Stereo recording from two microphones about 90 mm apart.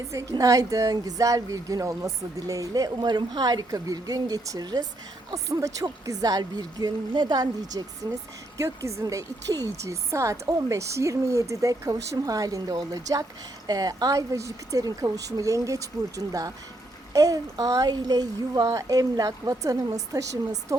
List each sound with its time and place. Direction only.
0.1 s a woman's voice: 40° right (ahead or behind)
8.5 s speech: 35° right (ahead or behind)